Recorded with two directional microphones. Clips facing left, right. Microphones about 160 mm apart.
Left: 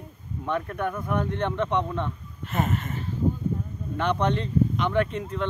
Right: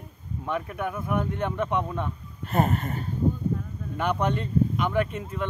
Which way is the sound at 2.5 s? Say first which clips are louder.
Right 3 dB; 40° right (ahead or behind).